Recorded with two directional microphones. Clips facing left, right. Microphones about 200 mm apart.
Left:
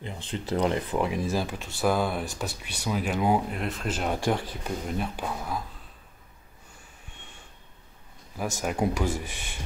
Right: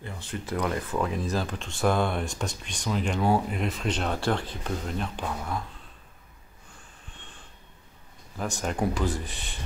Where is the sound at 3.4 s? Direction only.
Centre (ahead or behind).